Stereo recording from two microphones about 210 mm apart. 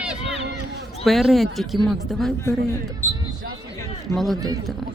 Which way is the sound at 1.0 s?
Centre (ahead or behind).